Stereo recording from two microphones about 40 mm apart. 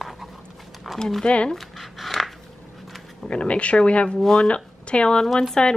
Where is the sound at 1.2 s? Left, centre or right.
Left.